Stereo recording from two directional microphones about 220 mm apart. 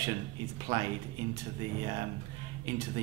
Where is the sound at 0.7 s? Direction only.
15° right (ahead or behind).